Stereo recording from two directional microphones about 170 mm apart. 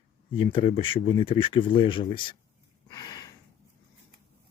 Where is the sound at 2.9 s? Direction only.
25° left (ahead or behind).